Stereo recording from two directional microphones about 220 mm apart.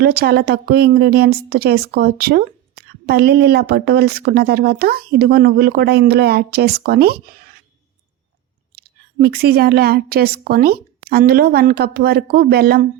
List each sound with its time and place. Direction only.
0.0 s speech: 45° right (ahead or behind)
8.7 s speech: 45° right (ahead or behind)